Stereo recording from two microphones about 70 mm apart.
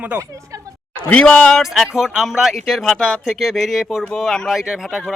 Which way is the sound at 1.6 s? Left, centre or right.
Centre.